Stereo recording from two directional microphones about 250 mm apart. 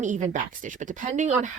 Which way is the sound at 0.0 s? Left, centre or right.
Right.